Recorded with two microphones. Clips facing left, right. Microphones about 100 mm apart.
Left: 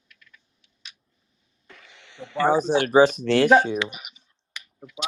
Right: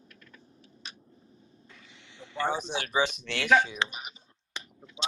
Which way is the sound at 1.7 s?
75° left (ahead or behind).